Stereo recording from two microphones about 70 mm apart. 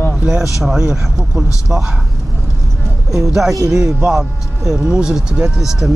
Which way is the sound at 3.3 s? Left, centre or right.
Centre.